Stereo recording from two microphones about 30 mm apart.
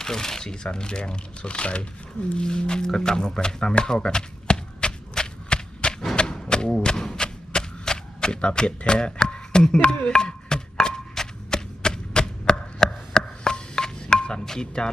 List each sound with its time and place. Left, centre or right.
0.0 s speech: centre; by 1.9 s left
2.4 s music: left
6.1 s a sound: left
9.7 s music: left
10.1 s a sound: left
11.8 s chop: left
14.8 s speech: left